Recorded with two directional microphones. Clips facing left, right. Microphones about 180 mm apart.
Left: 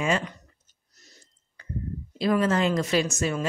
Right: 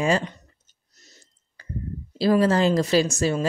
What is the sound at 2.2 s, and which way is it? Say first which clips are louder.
Speech: right 4 dB; 35° right (ahead or behind).